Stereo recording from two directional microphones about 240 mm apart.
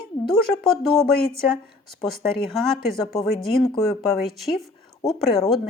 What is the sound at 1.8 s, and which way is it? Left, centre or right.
Speech, centre.